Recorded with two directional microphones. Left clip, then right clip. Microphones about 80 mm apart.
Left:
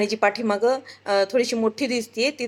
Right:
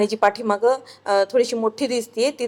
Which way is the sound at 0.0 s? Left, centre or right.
Centre.